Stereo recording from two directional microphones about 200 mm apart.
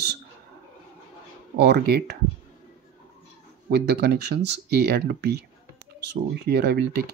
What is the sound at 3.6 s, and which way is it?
Speech, 55° right (ahead or behind).